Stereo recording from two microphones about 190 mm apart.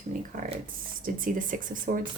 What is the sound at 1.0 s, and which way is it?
Speech, 45° right (ahead or behind).